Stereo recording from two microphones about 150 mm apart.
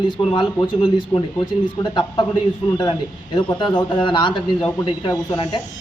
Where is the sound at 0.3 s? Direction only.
30° left (ahead or behind).